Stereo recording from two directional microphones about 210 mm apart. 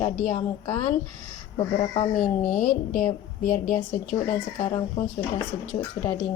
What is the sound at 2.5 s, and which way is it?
Speech, 40° left (ahead or behind).